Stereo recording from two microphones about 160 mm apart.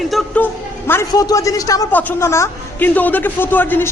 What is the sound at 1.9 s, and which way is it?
A man's voice, 10° left (ahead or behind).